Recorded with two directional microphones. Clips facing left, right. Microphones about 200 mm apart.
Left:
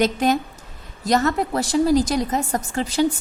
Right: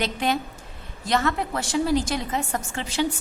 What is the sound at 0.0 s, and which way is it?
A woman's voice, 45° left (ahead or behind).